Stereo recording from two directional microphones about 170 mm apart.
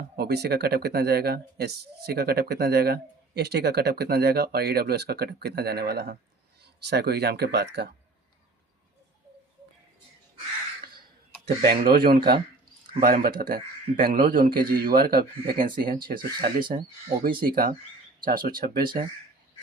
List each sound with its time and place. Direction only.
0.0 s speech: 70° right (ahead or behind)
11.4 s speech: 65° right (ahead or behind)
16.1 s speech: 30° right (ahead or behind)
17.4 s speech: 55° right (ahead or behind)